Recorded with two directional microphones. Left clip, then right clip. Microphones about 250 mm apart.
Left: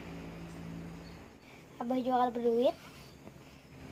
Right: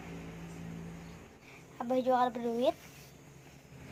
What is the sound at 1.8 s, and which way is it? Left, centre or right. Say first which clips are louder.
Speech: right 1 dB; right.